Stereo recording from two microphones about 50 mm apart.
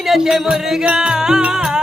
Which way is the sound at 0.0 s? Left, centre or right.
Centre.